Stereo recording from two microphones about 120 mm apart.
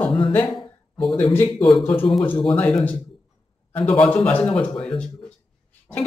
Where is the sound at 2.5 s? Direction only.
10° left (ahead or behind).